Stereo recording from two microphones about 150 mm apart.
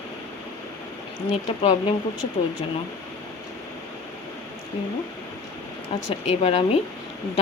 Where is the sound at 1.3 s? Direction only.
35° left (ahead or behind).